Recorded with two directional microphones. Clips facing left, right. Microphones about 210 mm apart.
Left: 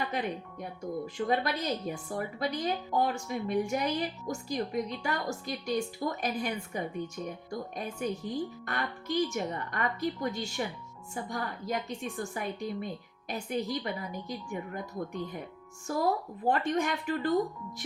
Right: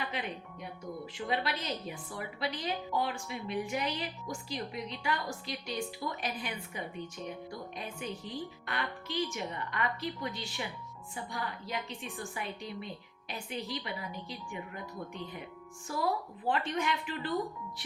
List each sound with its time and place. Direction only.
0.1 s a woman's voice: 45° left (ahead or behind)